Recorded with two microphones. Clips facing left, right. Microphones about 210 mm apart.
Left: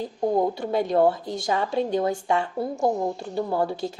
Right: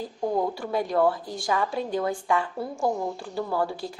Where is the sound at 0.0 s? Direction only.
20° left (ahead or behind).